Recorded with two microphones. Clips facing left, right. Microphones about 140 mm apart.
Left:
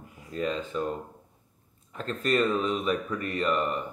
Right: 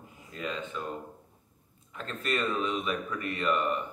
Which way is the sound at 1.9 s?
40° left (ahead or behind).